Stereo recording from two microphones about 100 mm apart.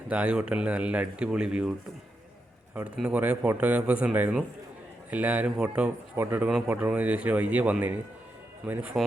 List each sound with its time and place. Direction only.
0.1 s speech: 10° right (ahead or behind)
2.8 s speech: 10° right (ahead or behind)